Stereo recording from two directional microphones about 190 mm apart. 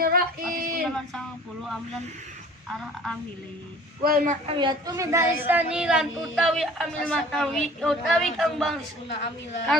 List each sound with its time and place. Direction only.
0.0 s speech: 50° right (ahead or behind)
0.8 s a woman's voice: 5° left (ahead or behind)
2.7 s a woman's voice: centre (ahead or behind)
4.0 s speech: 50° right (ahead or behind)
4.4 s a woman's voice: 25° right (ahead or behind); by 8.8 s centre (ahead or behind)